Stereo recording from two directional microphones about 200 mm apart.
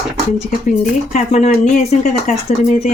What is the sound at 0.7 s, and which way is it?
Speech, 35° left (ahead or behind).